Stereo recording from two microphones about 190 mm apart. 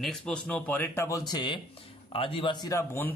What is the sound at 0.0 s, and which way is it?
Speech, 5° left (ahead or behind).